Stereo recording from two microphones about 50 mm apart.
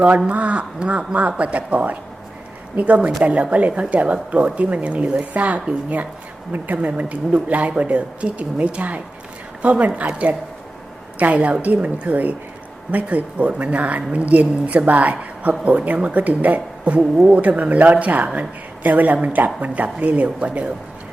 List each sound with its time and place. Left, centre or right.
0.3 s speech: right
17.0 s speech: centre